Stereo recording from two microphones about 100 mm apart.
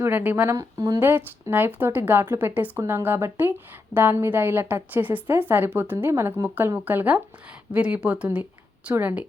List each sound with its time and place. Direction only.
0.0 s a woman's voice: 20° right (ahead or behind)
0.4 s speech: 35° right (ahead or behind)
1.0 s a woman's voice: 20° right (ahead or behind)